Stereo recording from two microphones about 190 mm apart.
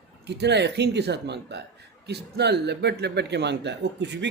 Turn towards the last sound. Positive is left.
turn(degrees=-65)  # may be behind; listen again after turning